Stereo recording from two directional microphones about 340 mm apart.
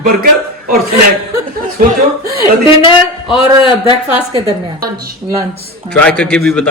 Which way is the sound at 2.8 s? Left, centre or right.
Centre.